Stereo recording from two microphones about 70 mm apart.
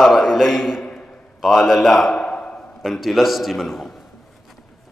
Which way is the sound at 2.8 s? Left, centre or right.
Centre.